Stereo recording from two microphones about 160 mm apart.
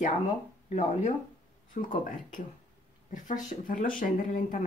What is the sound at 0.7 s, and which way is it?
Speech, 45° left (ahead or behind).